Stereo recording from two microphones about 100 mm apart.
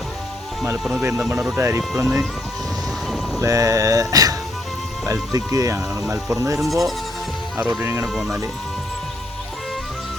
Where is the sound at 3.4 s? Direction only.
35° right (ahead or behind).